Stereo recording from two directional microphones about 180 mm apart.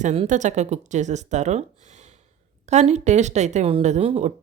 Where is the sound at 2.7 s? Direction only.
40° right (ahead or behind).